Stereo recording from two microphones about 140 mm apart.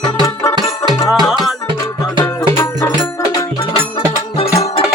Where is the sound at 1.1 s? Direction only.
Centre (ahead or behind).